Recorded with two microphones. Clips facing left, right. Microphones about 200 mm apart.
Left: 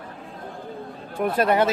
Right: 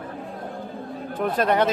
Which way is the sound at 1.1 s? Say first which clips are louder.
Left 1 dB; 10° left (ahead or behind).